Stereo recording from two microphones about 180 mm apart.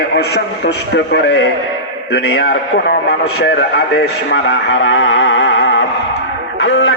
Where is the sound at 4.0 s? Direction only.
70° left (ahead or behind).